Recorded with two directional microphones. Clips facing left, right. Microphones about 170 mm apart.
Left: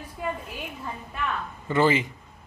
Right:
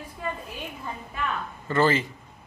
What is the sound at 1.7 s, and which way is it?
Speech, 15° left (ahead or behind).